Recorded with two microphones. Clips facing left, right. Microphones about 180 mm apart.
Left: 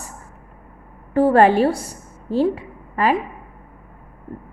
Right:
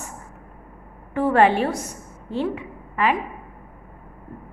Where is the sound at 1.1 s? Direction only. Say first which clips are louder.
Left 4 dB; 35° left (ahead or behind).